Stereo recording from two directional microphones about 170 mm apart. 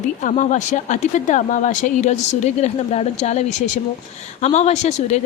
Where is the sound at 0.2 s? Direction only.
45° left (ahead or behind).